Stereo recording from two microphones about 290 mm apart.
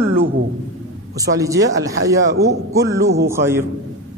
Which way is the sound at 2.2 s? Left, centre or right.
Right.